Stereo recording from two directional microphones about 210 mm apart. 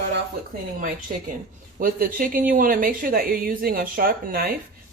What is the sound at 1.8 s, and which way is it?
A woman's voice, 45° right (ahead or behind).